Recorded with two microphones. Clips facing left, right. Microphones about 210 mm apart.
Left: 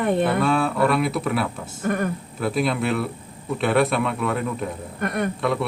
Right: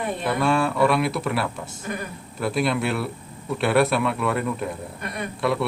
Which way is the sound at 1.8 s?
65° left (ahead or behind).